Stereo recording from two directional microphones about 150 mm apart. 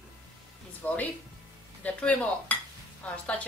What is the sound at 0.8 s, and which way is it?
A woman's voice, 15° left (ahead or behind).